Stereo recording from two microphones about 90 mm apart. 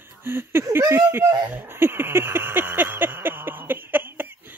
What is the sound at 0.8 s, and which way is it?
Speech, 40° right (ahead or behind).